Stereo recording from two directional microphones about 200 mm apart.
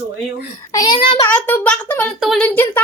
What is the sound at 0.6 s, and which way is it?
Speech, 20° left (ahead or behind).